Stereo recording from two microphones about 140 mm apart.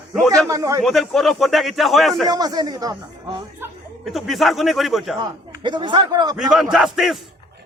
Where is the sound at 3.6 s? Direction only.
15° right (ahead or behind).